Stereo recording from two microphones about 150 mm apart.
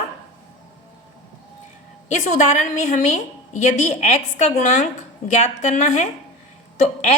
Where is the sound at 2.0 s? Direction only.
55° left (ahead or behind).